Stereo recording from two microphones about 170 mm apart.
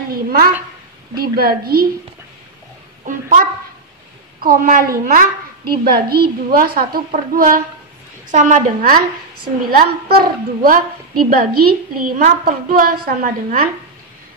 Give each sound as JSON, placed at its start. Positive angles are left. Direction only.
{"t": 0.1, "sound": "a sound", "side_deg": -60}
{"t": 1.1, "sound": "a woman's voice", "side_deg": -60}
{"t": 3.1, "sound": "a woman's voice", "side_deg": -55}